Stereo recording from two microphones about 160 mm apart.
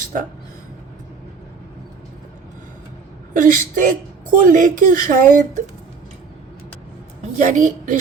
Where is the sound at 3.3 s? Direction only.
55° right (ahead or behind).